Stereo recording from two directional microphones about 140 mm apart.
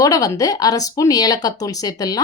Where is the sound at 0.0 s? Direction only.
25° left (ahead or behind).